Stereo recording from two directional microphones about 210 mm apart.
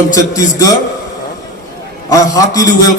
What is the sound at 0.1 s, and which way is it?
Speech, 15° left (ahead or behind).